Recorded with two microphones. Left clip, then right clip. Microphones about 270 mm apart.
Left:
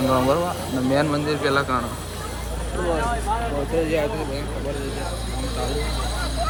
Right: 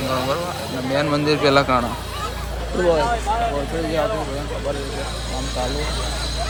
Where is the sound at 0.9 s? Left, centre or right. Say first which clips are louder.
Right 3 dB; centre.